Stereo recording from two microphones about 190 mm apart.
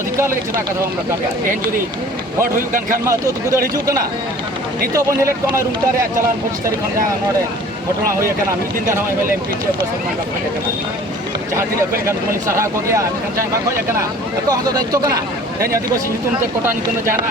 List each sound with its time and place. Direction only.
2.4 s a man's voice: 45° right (ahead or behind)
3.1 s speech: 15° right (ahead or behind)
8.2 s speech: 15° right (ahead or behind)
12.0 s speech: 15° right (ahead or behind)
14.5 s speech: 20° right (ahead or behind)